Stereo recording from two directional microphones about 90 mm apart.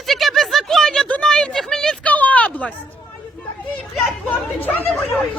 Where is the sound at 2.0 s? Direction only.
15° left (ahead or behind).